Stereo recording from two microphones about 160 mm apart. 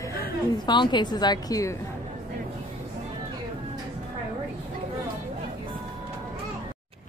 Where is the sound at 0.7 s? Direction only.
30° left (ahead or behind).